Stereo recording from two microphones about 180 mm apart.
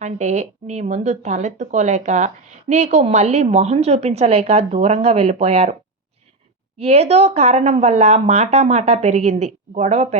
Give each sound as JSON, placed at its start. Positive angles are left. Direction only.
{"t": 0.0, "sound": "speech", "side_deg": -40}
{"t": 6.8, "sound": "speech", "side_deg": -35}